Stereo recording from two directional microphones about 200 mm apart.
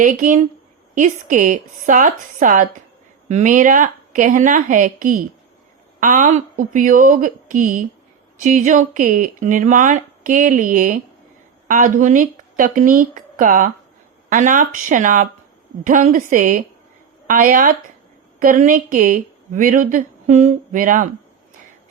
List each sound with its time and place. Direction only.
0.0 s a woman's voice: 40° right (ahead or behind)